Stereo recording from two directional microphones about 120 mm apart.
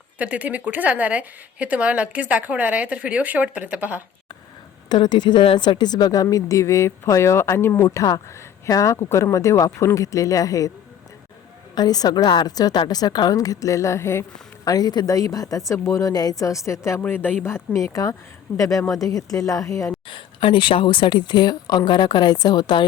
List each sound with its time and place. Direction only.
0.2 s a woman's voice: 10° right (ahead or behind)
4.9 s speech: 40° left (ahead or behind)
11.7 s speech: 35° left (ahead or behind)
20.1 s speech: 45° left (ahead or behind)